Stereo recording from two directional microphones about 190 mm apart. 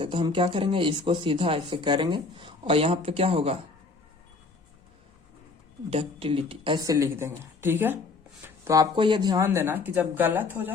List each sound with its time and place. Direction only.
0.0 s speech: 25° right (ahead or behind)
5.9 s speech: 30° right (ahead or behind); by 10.7 s 10° right (ahead or behind)